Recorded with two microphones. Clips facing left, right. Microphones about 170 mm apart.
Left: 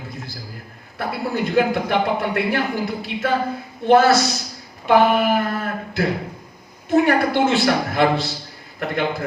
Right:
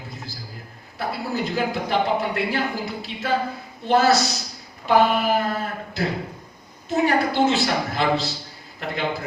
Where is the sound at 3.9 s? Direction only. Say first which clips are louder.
Left 4 dB; 55° left (ahead or behind).